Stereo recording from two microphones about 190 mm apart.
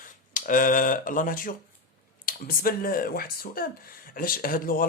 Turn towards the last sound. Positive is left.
turn(degrees=45)  # may be behind; listen again after turning